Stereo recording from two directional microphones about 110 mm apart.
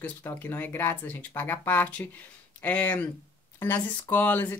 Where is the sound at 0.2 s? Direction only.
20° left (ahead or behind).